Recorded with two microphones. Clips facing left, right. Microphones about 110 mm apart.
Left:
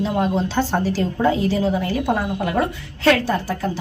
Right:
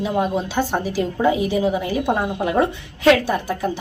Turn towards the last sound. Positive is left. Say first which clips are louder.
# even
turn(degrees=-15)  # may be behind; listen again after turning